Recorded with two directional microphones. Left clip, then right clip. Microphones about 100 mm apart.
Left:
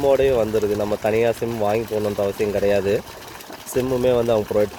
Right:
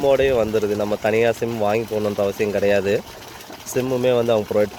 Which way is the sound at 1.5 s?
5° left (ahead or behind).